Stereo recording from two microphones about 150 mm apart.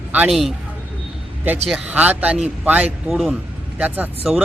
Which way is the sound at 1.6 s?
5° right (ahead or behind).